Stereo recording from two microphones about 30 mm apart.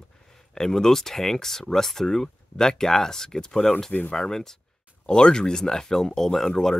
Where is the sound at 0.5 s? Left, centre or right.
Centre.